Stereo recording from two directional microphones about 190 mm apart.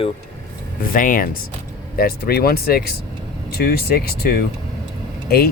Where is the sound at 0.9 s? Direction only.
45° left (ahead or behind).